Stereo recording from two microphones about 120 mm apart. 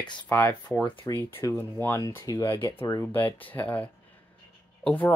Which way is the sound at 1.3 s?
20° left (ahead or behind).